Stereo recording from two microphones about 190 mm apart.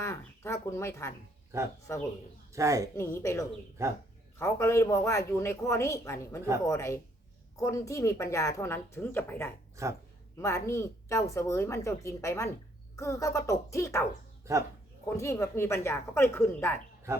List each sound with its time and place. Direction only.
0.0 s a woman's voice: 15° left (ahead or behind)
2.5 s speech: 15° right (ahead or behind)
3.0 s a woman's voice: 15° left (ahead or behind)
3.8 s speech: 15° right (ahead or behind)
4.4 s a woman's voice: 15° left (ahead or behind)
9.8 s speech: 15° right (ahead or behind)
10.3 s a woman's voice: 15° left (ahead or behind)
14.5 s speech: 15° right (ahead or behind)
15.1 s a woman's voice: 15° left (ahead or behind)
17.1 s speech: 15° right (ahead or behind)